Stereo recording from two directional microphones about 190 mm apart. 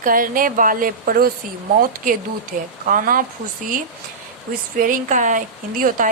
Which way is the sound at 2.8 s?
45° right (ahead or behind).